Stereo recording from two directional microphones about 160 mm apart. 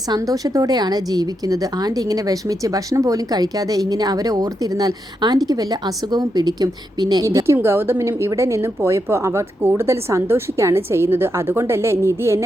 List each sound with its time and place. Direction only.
0.1 s a woman's voice: 20° right (ahead or behind)